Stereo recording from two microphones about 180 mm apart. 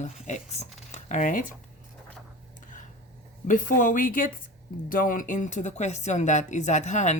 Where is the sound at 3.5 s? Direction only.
50° left (ahead or behind).